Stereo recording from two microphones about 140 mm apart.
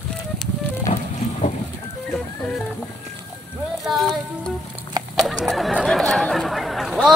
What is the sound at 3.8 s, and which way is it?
Boat, centre (ahead or behind).